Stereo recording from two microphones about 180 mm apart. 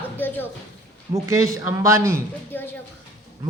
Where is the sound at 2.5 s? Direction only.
10° left (ahead or behind).